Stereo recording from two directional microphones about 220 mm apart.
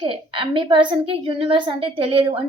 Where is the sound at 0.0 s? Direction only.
20° right (ahead or behind).